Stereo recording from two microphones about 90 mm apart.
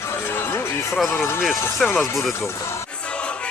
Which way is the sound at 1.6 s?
25° left (ahead or behind).